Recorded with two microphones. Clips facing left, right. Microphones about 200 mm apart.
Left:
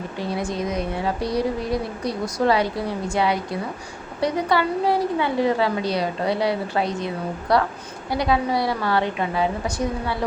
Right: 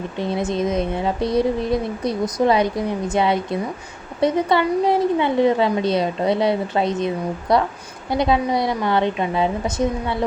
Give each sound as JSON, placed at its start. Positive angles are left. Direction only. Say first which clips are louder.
{"t": 0.2, "sound": "speech", "louder": "right 4 dB", "side_deg": -20}